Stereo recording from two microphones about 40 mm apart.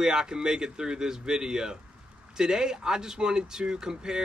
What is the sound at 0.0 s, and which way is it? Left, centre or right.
Speech, centre.